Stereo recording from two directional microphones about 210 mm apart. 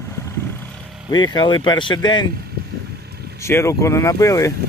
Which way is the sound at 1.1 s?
20° left (ahead or behind).